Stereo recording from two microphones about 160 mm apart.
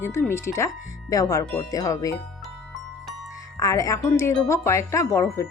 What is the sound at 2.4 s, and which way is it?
Music, centre (ahead or behind).